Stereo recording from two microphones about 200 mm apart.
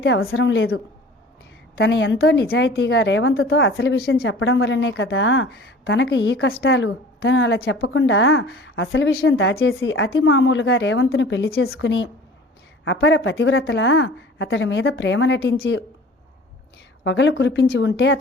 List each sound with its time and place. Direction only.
0.0 s a woman's voice: 65° left (ahead or behind)
1.8 s a woman's voice: 65° left (ahead or behind)
17.0 s a woman's voice: 65° left (ahead or behind)